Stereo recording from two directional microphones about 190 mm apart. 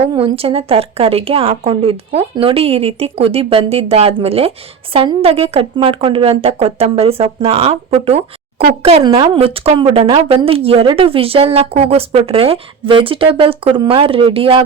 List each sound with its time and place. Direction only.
0.1 s a woman's voice: 25° right (ahead or behind)